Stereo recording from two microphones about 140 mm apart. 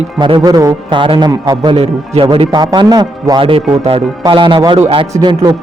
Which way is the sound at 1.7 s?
45° right (ahead or behind).